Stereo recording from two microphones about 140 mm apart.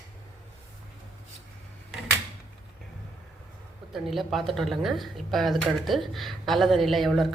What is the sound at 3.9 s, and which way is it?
Speech, centre (ahead or behind).